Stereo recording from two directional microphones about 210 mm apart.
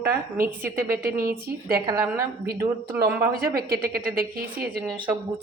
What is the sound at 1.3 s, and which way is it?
Speech, 45° right (ahead or behind).